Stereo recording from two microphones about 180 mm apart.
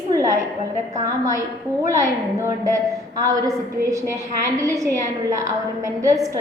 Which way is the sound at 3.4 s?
20° right (ahead or behind).